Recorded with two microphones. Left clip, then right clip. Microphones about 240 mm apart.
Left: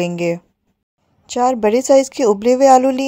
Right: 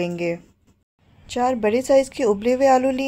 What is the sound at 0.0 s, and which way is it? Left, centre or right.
Speech, left.